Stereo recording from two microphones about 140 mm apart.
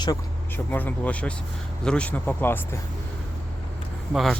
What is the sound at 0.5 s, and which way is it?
Speech, 15° left (ahead or behind).